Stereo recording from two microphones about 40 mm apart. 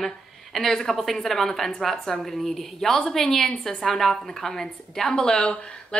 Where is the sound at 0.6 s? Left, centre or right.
Centre.